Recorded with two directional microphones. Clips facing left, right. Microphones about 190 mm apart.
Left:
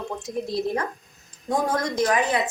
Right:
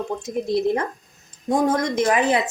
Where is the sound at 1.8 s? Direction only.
25° right (ahead or behind).